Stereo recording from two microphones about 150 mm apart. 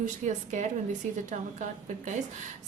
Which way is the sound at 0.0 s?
55° right (ahead or behind).